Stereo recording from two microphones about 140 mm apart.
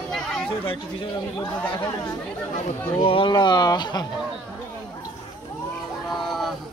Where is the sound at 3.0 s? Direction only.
40° left (ahead or behind).